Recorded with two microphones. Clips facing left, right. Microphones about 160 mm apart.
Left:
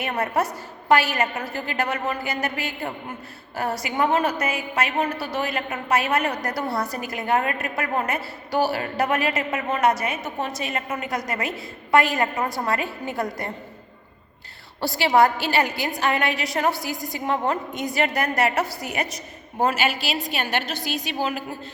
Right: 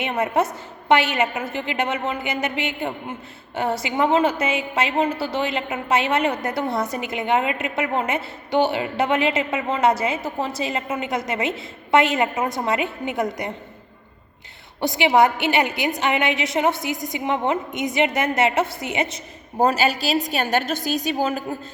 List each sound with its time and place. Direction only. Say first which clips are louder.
0.0 s a woman's voice: right 3 dB; 20° right (ahead or behind)
14.8 s a woman's voice: right 1 dB; 20° right (ahead or behind)
19.5 s a woman's voice: right 3 dB; 40° right (ahead or behind)